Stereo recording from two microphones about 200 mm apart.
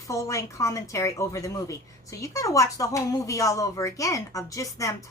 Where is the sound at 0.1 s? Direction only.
15° left (ahead or behind).